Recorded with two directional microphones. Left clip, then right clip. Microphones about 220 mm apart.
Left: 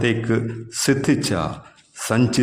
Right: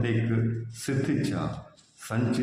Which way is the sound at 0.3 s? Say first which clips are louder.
Left 9 dB; 50° left (ahead or behind).